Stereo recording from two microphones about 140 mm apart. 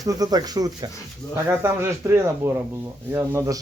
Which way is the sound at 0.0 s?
25° right (ahead or behind).